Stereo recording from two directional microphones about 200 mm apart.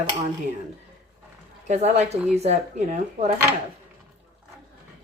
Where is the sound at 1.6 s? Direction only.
35° right (ahead or behind).